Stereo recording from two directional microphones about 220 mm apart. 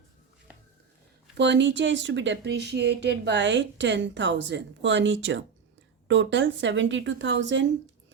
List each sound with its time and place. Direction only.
1.4 s speech: 55° right (ahead or behind)